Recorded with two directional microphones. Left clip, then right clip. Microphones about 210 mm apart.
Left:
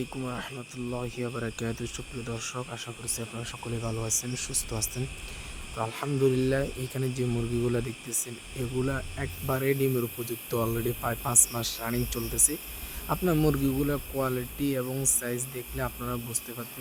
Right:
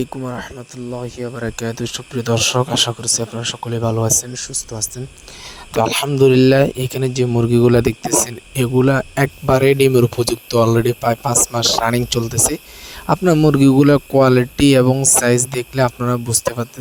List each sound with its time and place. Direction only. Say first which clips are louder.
0.0 s speech: right 10 dB; 30° right (ahead or behind)
4.4 s speech: right 8 dB; 20° right (ahead or behind)
5.7 s speech: right 16 dB; 50° right (ahead or behind)